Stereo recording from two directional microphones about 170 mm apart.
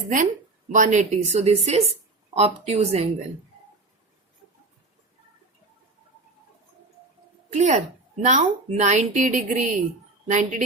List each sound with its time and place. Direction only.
0.7 s a woman's voice: 45° right (ahead or behind)
7.5 s a woman's voice: 45° right (ahead or behind)